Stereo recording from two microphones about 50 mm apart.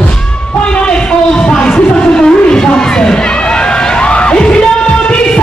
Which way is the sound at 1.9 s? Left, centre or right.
Centre.